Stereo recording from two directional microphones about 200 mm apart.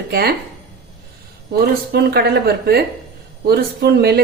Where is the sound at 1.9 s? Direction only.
55° right (ahead or behind).